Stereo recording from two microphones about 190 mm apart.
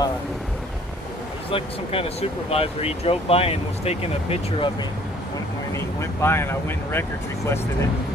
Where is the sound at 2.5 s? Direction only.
30° left (ahead or behind).